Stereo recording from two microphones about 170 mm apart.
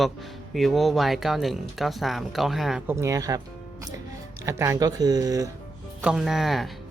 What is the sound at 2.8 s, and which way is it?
Speech, 15° right (ahead or behind).